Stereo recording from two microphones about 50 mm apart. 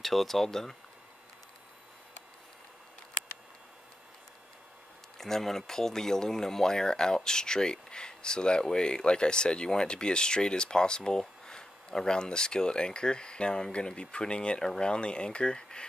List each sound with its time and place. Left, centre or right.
0.0 s speech: centre
5.2 s speech: centre